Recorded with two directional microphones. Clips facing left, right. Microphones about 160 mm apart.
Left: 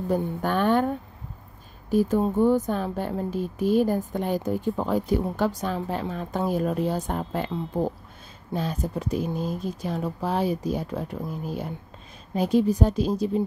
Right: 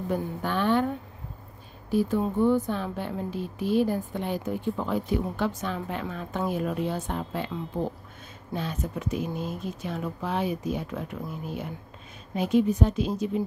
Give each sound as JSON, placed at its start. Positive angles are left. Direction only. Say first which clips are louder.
{"t": 0.1, "sound": "a woman's voice", "louder": "left 4 dB", "side_deg": 45}
{"t": 1.9, "sound": "speech", "louder": "left 3 dB", "side_deg": 45}